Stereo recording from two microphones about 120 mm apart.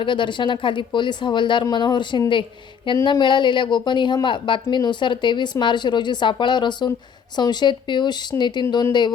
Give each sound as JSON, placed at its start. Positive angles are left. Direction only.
{"t": 0.0, "sound": "speech", "side_deg": 40}